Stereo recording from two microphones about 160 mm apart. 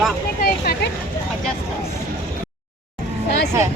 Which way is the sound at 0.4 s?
75° left (ahead or behind).